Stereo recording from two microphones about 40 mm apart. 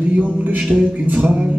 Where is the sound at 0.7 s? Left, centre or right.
Right.